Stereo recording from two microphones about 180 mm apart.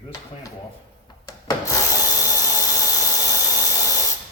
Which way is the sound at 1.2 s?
20° left (ahead or behind).